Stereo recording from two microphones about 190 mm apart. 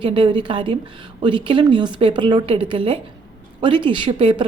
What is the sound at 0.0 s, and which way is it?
A woman's voice, 25° right (ahead or behind).